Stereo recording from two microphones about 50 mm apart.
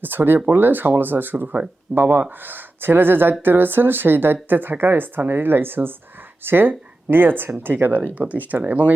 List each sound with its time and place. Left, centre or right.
0.0 s speech: right